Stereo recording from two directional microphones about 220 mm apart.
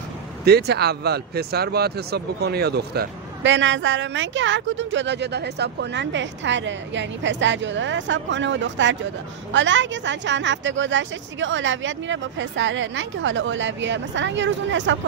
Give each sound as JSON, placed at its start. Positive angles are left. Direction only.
{"t": 0.5, "sound": "speech", "side_deg": -45}